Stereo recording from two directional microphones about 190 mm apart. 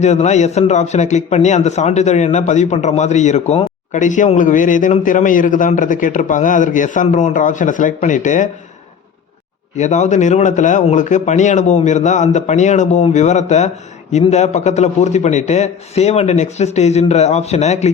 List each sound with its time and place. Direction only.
0.0 s a man's voice: 35° left (ahead or behind)
9.7 s a man's voice: 40° left (ahead or behind)